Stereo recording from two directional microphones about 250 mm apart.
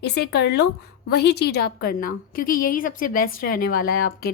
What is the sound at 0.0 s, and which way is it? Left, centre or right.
A woman's voice, left.